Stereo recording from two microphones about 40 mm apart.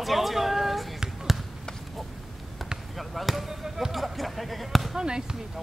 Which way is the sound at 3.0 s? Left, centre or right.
Centre.